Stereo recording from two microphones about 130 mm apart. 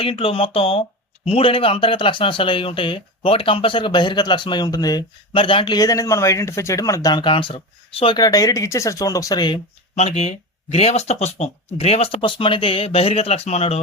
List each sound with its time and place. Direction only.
0.0 s speech: 45° left (ahead or behind); by 5.0 s 30° left (ahead or behind)
5.3 s speech: 40° left (ahead or behind)
9.9 s speech: 60° left (ahead or behind)